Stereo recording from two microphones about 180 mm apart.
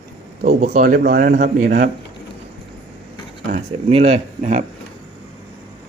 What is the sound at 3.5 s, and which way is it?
Speech, 35° right (ahead or behind).